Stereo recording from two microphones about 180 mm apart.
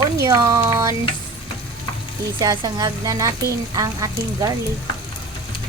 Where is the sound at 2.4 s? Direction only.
20° right (ahead or behind).